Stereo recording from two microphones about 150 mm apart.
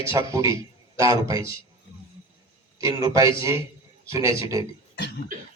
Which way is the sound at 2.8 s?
20° right (ahead or behind).